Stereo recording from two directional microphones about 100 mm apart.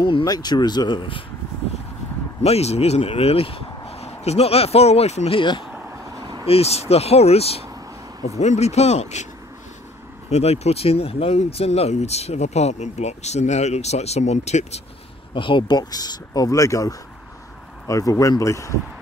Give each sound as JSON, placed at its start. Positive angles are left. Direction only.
{"t": 0.2, "sound": "speech", "side_deg": 40}
{"t": 2.4, "sound": "speech", "side_deg": 90}
{"t": 6.4, "sound": "speech", "side_deg": 85}
{"t": 10.4, "sound": "speech", "side_deg": 90}
{"t": 15.3, "sound": "speech", "side_deg": 55}